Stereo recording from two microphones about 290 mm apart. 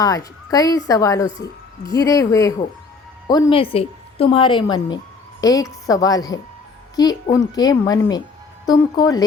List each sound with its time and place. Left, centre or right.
0.0 s a woman's voice: centre